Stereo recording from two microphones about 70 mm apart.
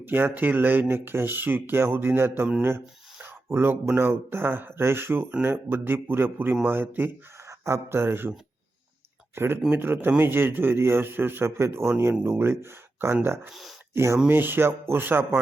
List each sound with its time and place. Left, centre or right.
0.0 s speech: right
7.4 s speech: right
9.3 s speech: right
13.5 s speech: centre
13.9 s speech: right
14.3 s speech: right